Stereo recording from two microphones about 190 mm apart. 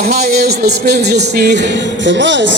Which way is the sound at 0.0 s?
55° right (ahead or behind).